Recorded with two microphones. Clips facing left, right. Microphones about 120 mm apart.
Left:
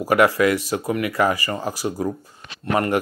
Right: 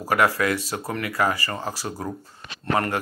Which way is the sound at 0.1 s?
20° left (ahead or behind).